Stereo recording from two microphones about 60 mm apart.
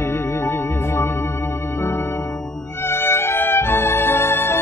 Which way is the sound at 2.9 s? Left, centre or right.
Left.